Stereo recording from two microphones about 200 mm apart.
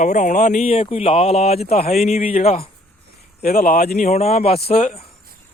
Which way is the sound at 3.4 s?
50° left (ahead or behind).